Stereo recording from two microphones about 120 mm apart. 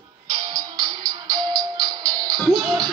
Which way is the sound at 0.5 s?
35° right (ahead or behind).